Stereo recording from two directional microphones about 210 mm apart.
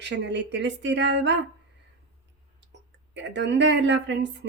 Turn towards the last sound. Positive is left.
turn(degrees=-55)  # may be behind; listen again after turning